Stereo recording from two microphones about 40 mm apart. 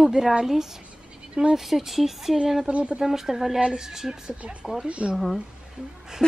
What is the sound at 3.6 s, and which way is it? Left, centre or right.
A woman's voice, centre.